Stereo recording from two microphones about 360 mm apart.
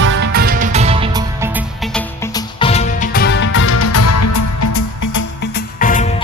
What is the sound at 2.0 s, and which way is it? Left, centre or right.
Music, centre.